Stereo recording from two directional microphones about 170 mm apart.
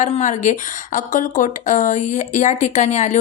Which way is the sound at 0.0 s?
45° left (ahead or behind).